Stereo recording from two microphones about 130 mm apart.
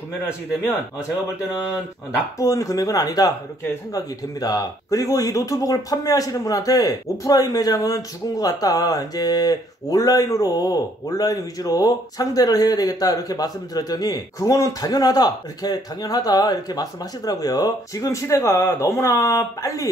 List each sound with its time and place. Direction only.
2.3 s speech: 25° left (ahead or behind)